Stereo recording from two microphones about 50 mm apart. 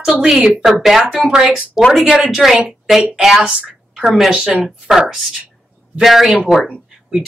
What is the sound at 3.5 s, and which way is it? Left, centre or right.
Speech, right.